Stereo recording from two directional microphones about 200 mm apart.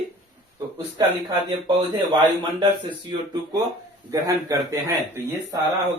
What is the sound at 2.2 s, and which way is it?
Speech, 25° right (ahead or behind).